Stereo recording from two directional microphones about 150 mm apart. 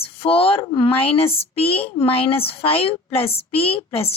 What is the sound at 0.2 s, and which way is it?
Speech, 40° left (ahead or behind).